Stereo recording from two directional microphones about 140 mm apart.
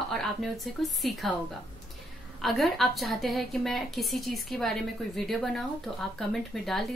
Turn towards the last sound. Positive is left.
turn(degrees=0)  # may be behind; listen again after turning